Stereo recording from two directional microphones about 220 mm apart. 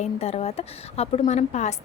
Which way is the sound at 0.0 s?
30° left (ahead or behind).